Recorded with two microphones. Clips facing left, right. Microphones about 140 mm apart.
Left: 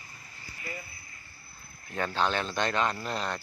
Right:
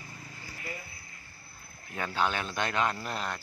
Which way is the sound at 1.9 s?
5° right (ahead or behind).